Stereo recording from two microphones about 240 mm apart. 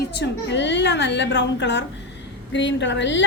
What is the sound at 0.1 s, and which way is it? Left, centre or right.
A woman's voice, left.